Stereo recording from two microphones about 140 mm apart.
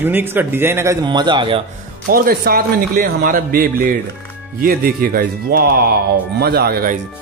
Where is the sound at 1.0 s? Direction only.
30° right (ahead or behind).